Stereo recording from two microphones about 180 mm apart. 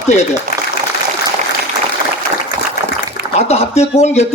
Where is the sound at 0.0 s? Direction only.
40° left (ahead or behind).